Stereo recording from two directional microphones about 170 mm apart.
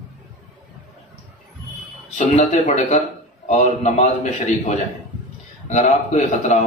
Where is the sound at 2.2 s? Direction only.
45° left (ahead or behind).